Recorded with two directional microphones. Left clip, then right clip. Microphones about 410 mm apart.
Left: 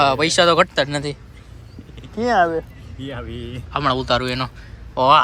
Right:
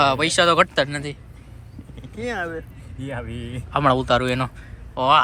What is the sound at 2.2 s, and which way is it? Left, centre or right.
Speech, centre.